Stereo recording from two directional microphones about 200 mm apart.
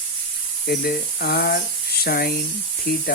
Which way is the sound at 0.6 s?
50° left (ahead or behind).